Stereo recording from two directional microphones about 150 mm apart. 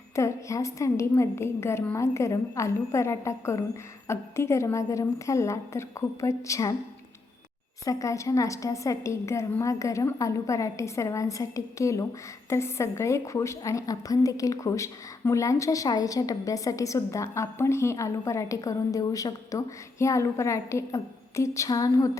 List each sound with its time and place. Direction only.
0.2 s a woman's voice: 20° left (ahead or behind)
7.9 s a woman's voice: 20° left (ahead or behind)